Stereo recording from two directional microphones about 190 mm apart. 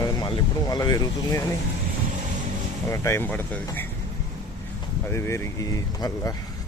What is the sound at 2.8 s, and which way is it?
Speech, 15° left (ahead or behind).